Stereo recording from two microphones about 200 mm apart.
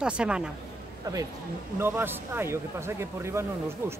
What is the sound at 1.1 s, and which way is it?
Speech, 20° right (ahead or behind).